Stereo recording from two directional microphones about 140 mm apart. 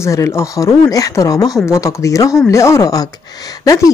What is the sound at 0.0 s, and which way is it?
Speech, 20° left (ahead or behind).